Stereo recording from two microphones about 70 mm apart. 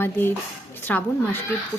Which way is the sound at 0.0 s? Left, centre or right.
Left.